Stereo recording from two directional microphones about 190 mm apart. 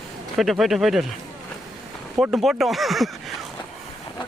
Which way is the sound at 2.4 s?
Centre (ahead or behind).